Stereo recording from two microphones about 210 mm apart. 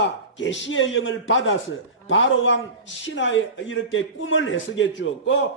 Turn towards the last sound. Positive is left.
turn(degrees=60)  # may be behind; listen again after turning